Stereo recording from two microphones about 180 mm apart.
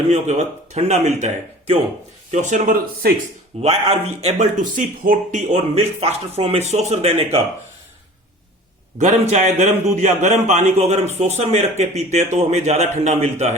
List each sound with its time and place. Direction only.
0.1 s speech: 40° right (ahead or behind); by 3.2 s 55° right (ahead or behind)
3.6 s speech: 35° right (ahead or behind)
9.0 s speech: 40° right (ahead or behind)